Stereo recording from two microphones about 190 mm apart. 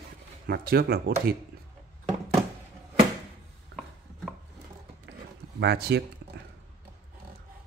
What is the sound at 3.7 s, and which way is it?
Chopping, 60° right (ahead or behind).